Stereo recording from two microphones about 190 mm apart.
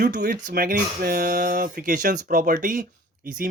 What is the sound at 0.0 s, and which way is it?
Speech, 60° right (ahead or behind).